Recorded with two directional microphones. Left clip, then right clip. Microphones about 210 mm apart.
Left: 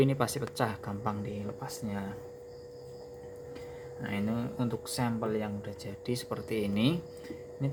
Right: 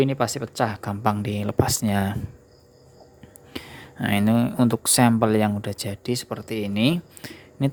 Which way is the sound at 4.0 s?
45° right (ahead or behind).